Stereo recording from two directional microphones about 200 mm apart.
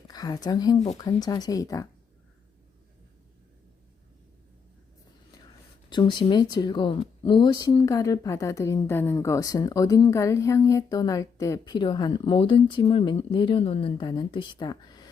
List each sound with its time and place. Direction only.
0.1 s a woman's voice: 20° left (ahead or behind)
5.9 s speech: 25° left (ahead or behind)